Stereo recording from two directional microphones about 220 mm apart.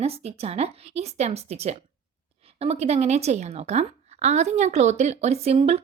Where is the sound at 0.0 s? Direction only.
30° right (ahead or behind).